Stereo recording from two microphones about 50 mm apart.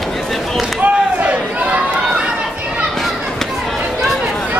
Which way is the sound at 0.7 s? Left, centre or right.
Right.